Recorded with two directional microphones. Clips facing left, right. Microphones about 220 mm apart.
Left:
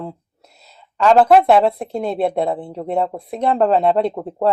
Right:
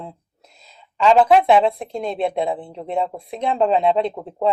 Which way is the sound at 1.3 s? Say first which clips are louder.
Left 2 dB; 55° left (ahead or behind).